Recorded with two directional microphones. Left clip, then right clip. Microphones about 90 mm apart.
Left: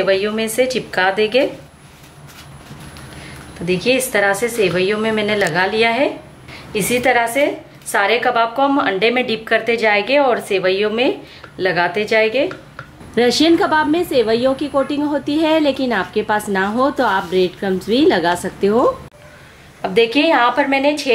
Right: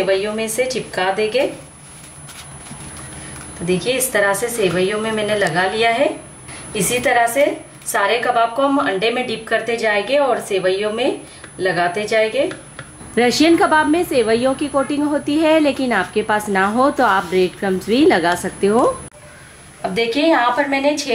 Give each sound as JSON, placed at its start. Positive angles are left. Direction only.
{"t": 0.0, "sound": "speech", "side_deg": 20}
{"t": 3.6, "sound": "a woman's voice", "side_deg": 20}
{"t": 13.1, "sound": "a woman's voice", "side_deg": 5}
{"t": 19.8, "sound": "speech", "side_deg": 20}